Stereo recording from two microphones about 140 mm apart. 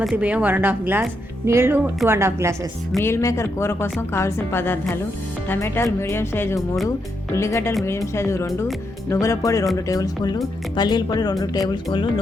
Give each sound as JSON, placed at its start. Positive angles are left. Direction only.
{"t": 0.0, "sound": "a woman's voice", "side_deg": -5}
{"t": 3.0, "sound": "speech", "side_deg": 20}